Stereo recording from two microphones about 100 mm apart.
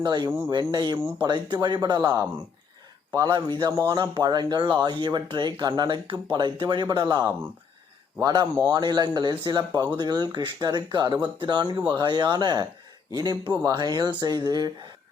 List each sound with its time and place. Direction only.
0.0 s speech: 50° right (ahead or behind)
0.3 s speech: 25° right (ahead or behind)
0.7 s speech: 45° right (ahead or behind)
3.3 s speech: 50° right (ahead or behind)
3.7 s speech: 30° right (ahead or behind)
3.9 s speech: 50° right (ahead or behind)